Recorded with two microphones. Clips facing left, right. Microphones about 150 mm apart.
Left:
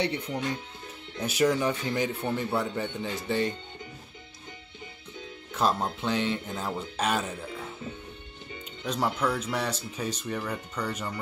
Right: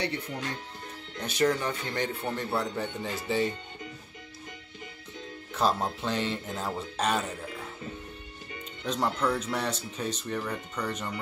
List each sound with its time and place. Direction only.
0.0 s speech: 20° left (ahead or behind)
1.1 s a man's voice: 10° left (ahead or behind)
5.5 s a man's voice: centre (ahead or behind)
8.8 s a man's voice: 5° left (ahead or behind)